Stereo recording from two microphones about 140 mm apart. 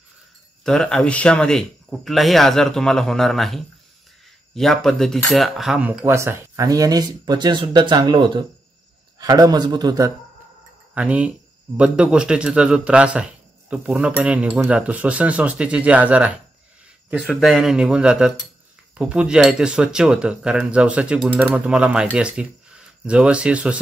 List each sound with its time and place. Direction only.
0.7 s speech: 5° left (ahead or behind); by 10.1 s 25° right (ahead or behind)
11.0 s speech: 10° right (ahead or behind)
17.2 s speech: centre (ahead or behind)